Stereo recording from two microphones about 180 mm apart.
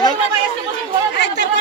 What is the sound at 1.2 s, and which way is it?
Chatter, 70° left (ahead or behind).